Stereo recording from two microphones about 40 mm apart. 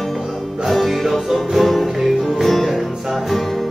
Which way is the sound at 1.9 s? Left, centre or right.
Centre.